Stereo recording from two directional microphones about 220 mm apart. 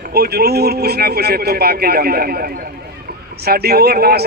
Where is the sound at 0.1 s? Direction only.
45° right (ahead or behind).